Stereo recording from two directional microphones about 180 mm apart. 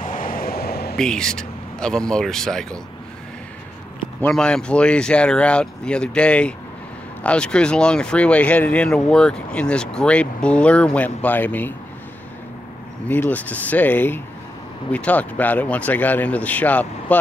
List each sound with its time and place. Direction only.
0.0 s vehicle: 50° left (ahead or behind)
0.9 s speech: 5° left (ahead or behind)
4.2 s speech: 5° left (ahead or behind)
13.1 s speech: 10° left (ahead or behind)